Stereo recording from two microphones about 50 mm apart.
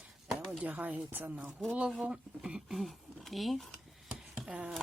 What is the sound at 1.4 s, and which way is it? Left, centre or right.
Speech, right.